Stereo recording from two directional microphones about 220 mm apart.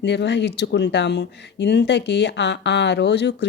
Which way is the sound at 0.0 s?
50° left (ahead or behind).